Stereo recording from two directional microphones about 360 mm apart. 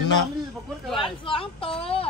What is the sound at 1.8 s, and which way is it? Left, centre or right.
Child singing, centre.